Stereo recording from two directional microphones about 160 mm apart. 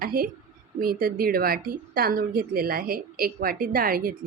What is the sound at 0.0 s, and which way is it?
A woman's voice, 65° right (ahead or behind).